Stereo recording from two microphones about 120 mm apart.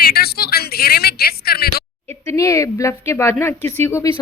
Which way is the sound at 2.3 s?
25° left (ahead or behind).